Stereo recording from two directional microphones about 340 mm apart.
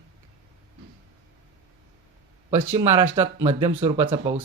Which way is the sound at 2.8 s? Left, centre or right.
Centre.